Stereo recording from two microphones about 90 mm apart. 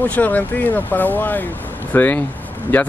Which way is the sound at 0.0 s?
20° left (ahead or behind).